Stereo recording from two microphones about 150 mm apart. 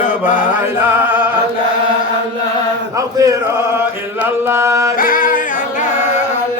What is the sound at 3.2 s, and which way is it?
Chant, 20° right (ahead or behind).